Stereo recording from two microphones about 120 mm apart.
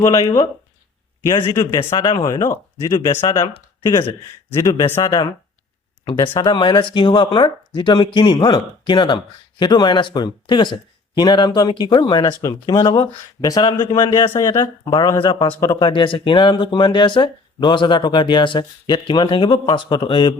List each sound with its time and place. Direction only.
0.0 s speech: 30° left (ahead or behind)
4.6 s speech: 30° left (ahead or behind)
6.4 s speech: 40° left (ahead or behind)